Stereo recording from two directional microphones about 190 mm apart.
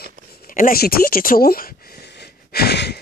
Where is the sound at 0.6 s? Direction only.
50° left (ahead or behind).